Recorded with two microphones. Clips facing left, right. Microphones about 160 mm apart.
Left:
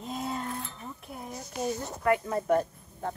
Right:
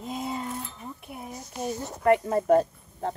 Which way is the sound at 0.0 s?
5° right (ahead or behind).